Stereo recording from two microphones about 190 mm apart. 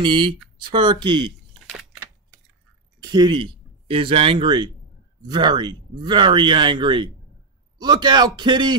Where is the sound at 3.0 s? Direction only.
20° right (ahead or behind).